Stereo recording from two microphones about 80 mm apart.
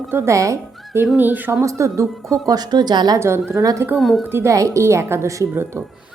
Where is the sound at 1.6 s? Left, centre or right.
Right.